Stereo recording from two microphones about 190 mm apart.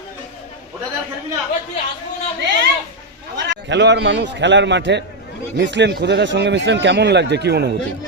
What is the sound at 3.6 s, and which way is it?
A man's voice, 65° right (ahead or behind).